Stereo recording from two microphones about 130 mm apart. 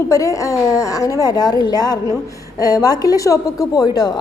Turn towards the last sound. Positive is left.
turn(degrees=30)  # may be behind; listen again after turning